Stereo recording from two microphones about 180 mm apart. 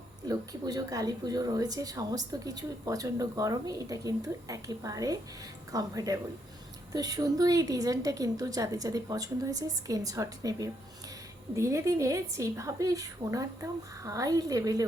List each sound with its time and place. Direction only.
0.3 s a woman's voice: 20° right (ahead or behind)